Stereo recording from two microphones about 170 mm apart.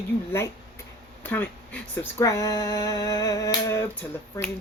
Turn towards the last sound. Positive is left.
turn(degrees=15)  # may be behind; listen again after turning